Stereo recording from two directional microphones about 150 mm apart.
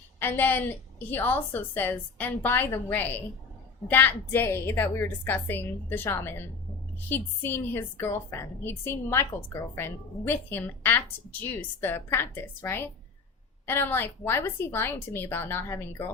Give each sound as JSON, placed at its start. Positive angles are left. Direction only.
{"t": 0.2, "sound": "a woman's voice", "side_deg": 15}